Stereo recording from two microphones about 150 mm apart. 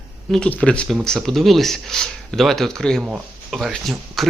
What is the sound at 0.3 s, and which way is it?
Speech, 5° left (ahead or behind).